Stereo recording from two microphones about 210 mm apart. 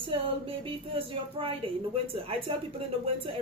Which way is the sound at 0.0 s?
25° right (ahead or behind).